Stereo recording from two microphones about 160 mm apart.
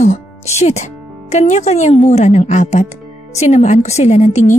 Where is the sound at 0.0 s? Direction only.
45° left (ahead or behind).